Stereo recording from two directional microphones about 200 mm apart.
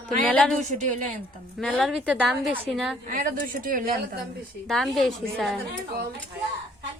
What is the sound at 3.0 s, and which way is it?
Speech, 45° right (ahead or behind).